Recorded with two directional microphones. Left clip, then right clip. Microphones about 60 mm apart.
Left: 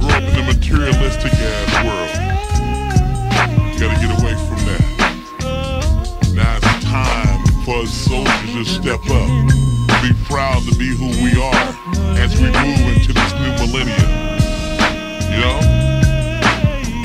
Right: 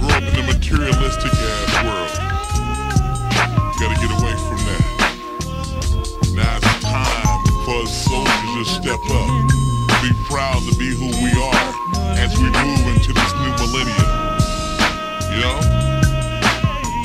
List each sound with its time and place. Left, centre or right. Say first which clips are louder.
0.0 s music: left 1 dB; left
3.8 s music: left 5 dB; left
6.4 s music: left 1 dB; left